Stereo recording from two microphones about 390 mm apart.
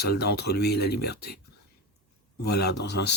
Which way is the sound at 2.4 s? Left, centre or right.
Left.